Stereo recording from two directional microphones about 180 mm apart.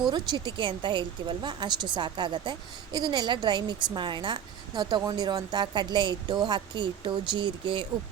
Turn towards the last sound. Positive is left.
turn(degrees=-25)  # may be behind; listen again after turning